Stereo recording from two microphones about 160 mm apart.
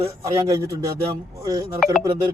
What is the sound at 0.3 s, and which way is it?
Speech, 20° right (ahead or behind).